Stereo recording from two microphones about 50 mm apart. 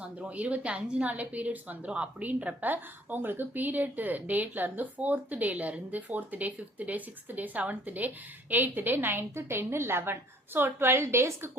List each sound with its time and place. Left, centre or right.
0.0 s a woman's voice: right